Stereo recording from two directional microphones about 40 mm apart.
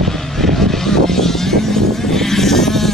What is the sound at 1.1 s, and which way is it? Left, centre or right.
Sheep, centre.